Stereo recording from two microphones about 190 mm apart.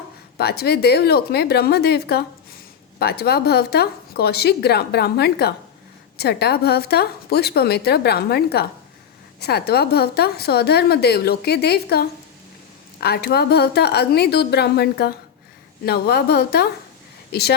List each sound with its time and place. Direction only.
0.3 s a woman's voice: 55° left (ahead or behind)